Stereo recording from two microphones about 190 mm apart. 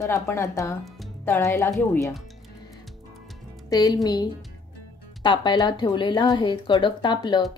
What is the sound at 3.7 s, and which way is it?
Speech, 20° left (ahead or behind).